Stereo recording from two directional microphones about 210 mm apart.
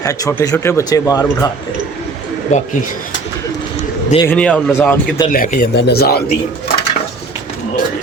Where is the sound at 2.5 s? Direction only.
35° left (ahead or behind).